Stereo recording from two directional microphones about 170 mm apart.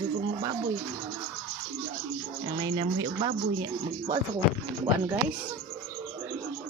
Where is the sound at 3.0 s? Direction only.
25° right (ahead or behind).